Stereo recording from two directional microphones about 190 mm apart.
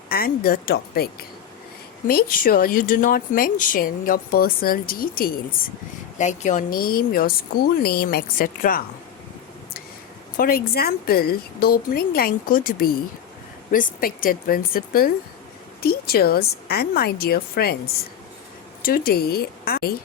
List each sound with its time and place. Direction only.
0.1 s speech: 50° left (ahead or behind)
10.3 s a woman's voice: 50° left (ahead or behind)
18.8 s speech: 50° left (ahead or behind)